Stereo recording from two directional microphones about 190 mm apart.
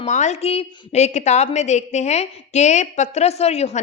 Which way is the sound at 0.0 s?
40° left (ahead or behind).